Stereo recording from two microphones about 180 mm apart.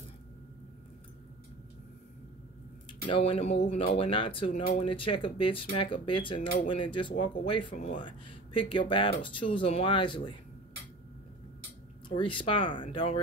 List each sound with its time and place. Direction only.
3.1 s speech: 35° left (ahead or behind)
12.1 s speech: 30° left (ahead or behind)